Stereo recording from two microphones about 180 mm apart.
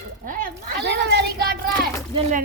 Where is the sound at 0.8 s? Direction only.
70° right (ahead or behind).